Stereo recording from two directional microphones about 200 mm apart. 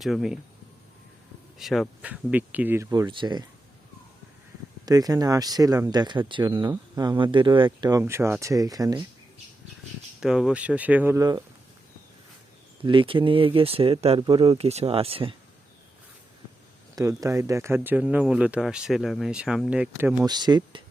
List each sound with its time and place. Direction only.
0.0 s speech: centre (ahead or behind)
1.5 s speech: centre (ahead or behind); by 3.4 s 25° right (ahead or behind)
4.9 s speech: 20° right (ahead or behind)
10.2 s speech: 5° right (ahead or behind)
12.8 s speech: 25° right (ahead or behind)
16.9 s speech: 15° right (ahead or behind)
20.2 s speech: 20° right (ahead or behind)